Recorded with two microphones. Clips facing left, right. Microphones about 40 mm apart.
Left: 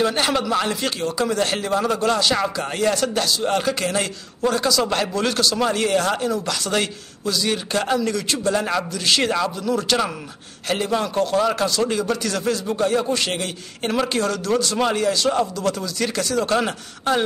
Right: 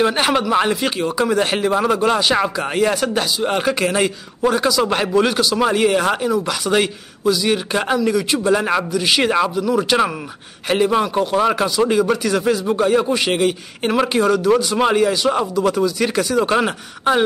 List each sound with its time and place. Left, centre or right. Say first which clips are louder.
0.0 s a man's voice: right 4 dB; right